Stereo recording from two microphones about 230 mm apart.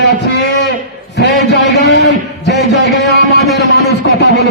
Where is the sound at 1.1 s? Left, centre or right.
Left.